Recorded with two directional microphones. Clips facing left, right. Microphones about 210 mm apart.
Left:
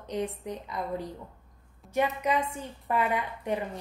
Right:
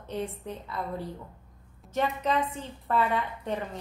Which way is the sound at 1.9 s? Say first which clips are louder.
Left 1 dB; 10° left (ahead or behind).